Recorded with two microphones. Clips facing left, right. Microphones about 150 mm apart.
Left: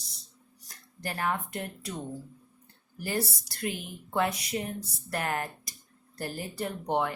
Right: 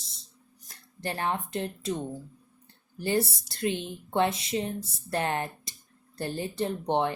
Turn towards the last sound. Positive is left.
turn(degrees=-25)  # may be behind; listen again after turning